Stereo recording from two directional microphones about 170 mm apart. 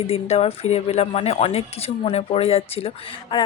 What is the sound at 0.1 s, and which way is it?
A woman's voice, 35° left (ahead or behind).